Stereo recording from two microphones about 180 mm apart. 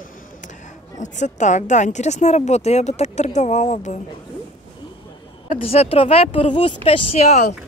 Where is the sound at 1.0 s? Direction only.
40° left (ahead or behind).